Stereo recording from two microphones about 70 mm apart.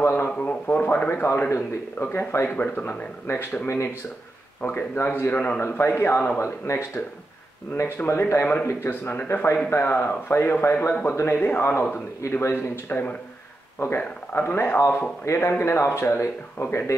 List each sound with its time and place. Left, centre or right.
0.0 s a sound: left
0.4 s speech: left
1.1 s speech: left
2.5 s speech: left
3.6 s speech: left
4.6 s speech: left
5.7 s speech: left
15.3 s speech: left